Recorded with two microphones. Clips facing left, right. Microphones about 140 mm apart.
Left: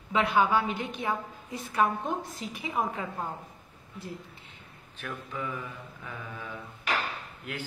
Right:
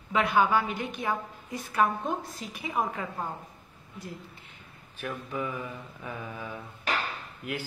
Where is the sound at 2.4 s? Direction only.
20° left (ahead or behind).